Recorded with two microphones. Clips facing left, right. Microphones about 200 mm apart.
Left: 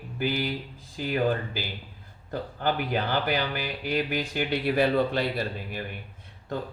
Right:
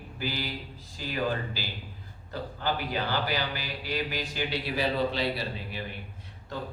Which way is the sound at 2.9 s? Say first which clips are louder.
Left 3 dB; 55° left (ahead or behind).